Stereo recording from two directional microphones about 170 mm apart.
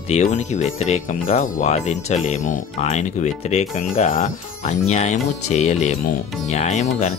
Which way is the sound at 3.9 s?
50° left (ahead or behind).